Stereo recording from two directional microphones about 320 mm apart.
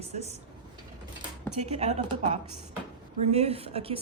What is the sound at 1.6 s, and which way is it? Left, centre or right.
A woman's voice, right.